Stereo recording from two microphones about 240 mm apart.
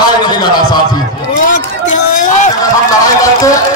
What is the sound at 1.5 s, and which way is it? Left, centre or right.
Speech, left.